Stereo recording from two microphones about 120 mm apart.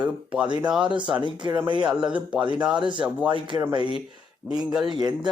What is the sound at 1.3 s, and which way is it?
Speech, 40° right (ahead or behind).